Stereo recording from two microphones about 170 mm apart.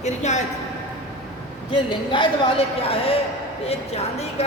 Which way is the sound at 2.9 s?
35° left (ahead or behind).